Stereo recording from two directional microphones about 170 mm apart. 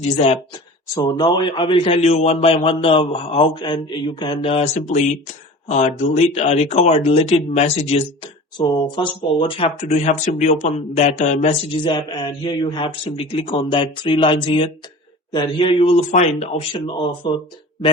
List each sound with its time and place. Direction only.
0.9 s a man's voice: 25° left (ahead or behind)
8.5 s a man's voice: 25° left (ahead or behind); by 11.5 s 45° left (ahead or behind)
11.7 s a man's voice: 30° left (ahead or behind)